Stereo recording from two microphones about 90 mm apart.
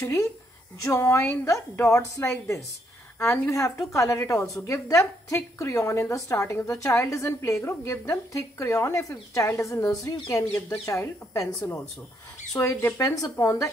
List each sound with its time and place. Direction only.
0.0 s a woman's voice: 35° left (ahead or behind)